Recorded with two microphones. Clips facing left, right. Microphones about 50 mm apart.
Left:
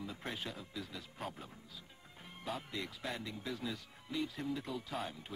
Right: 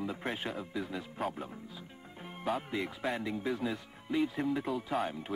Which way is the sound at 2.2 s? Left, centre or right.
Right.